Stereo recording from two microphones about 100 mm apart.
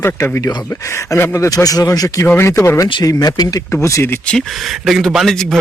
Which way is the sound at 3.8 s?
25° left (ahead or behind).